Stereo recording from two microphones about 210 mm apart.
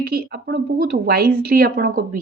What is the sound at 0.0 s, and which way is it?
Speech, 50° right (ahead or behind).